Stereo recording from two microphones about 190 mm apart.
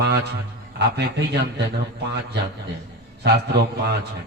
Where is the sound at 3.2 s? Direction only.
60° right (ahead or behind).